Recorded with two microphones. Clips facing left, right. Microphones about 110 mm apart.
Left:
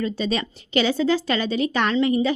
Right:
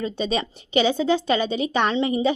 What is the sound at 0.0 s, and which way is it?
A woman's voice, 15° right (ahead or behind).